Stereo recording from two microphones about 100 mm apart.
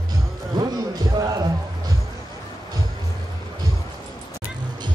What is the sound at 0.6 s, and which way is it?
Music, 40° right (ahead or behind).